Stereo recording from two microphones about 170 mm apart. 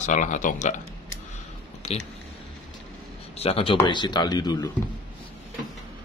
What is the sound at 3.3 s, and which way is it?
Speech, 35° left (ahead or behind).